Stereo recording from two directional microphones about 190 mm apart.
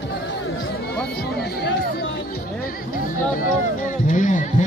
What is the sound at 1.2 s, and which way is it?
Speech, 60° left (ahead or behind).